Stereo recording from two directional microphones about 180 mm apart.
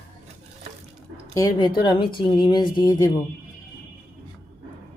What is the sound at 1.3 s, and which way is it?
A woman's voice, 20° left (ahead or behind).